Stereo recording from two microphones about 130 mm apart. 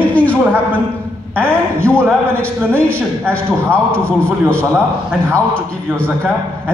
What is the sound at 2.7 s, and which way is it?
A man's voice, 10° left (ahead or behind).